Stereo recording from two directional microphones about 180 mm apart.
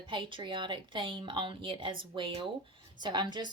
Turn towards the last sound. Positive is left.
turn(degrees=-25)  # may be behind; listen again after turning